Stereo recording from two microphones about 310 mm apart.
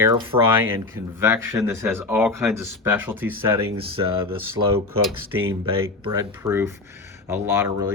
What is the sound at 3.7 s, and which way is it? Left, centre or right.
Speech, centre.